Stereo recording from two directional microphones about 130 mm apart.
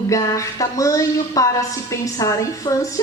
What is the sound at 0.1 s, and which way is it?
A woman's voice, 25° left (ahead or behind).